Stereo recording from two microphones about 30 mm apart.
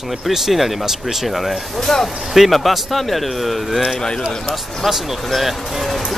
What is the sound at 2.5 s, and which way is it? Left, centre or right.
A man's voice, centre.